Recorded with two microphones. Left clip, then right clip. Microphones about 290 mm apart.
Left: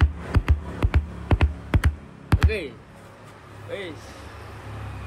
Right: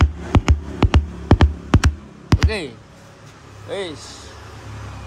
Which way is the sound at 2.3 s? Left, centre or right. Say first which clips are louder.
Right 4 dB; right.